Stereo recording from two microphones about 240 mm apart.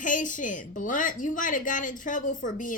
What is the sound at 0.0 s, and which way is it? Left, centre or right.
A woman's voice, left.